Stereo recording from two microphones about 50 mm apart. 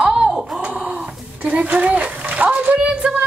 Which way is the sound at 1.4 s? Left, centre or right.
Right.